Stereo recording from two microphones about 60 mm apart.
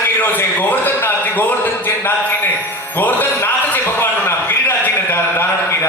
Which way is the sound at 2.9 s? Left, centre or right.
Left.